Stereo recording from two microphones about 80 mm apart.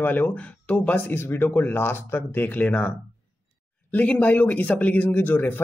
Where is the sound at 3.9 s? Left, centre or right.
Centre.